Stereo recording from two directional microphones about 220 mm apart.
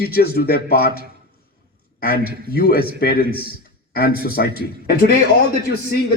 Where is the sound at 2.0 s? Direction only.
45° left (ahead or behind).